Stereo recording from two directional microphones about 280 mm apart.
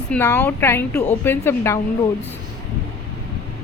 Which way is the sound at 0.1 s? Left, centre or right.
Centre.